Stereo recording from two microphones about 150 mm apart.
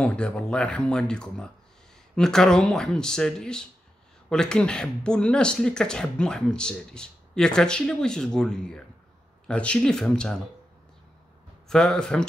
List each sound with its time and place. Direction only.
0.0 s speech: 5° left (ahead or behind)
11.7 s speech: 5° left (ahead or behind)